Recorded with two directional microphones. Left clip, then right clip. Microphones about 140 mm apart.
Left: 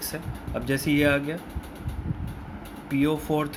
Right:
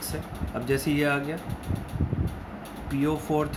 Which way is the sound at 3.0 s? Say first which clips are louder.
Left 1 dB; 35° left (ahead or behind).